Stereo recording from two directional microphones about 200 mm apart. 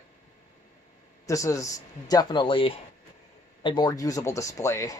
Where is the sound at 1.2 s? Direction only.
15° left (ahead or behind).